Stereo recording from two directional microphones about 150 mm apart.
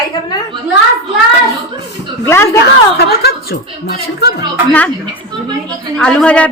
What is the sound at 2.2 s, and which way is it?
Speech, 20° left (ahead or behind).